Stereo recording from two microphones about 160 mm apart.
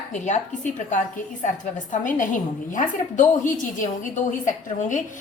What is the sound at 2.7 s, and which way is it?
A woman's voice, 55° left (ahead or behind).